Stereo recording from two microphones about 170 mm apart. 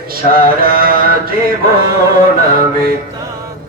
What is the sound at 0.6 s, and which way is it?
Mantra, 60° right (ahead or behind).